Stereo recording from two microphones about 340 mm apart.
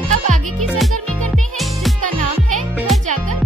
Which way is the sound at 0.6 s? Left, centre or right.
Centre.